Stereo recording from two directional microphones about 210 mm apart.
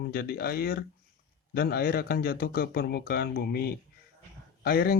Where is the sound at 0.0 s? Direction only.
50° left (ahead or behind).